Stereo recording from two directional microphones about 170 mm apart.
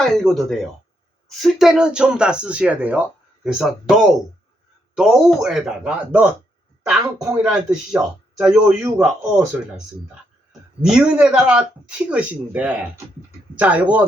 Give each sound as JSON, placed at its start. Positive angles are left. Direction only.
{"t": 0.0, "sound": "speech", "side_deg": 5}
{"t": 7.3, "sound": "speech", "side_deg": -5}
{"t": 10.8, "sound": "speech", "side_deg": -5}